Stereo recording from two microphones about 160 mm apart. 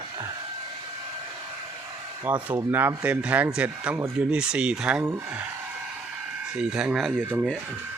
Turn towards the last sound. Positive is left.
turn(degrees=-10)  # may be behind; listen again after turning